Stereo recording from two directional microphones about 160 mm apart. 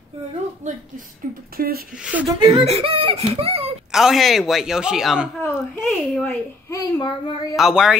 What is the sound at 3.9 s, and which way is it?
Speech, centre (ahead or behind).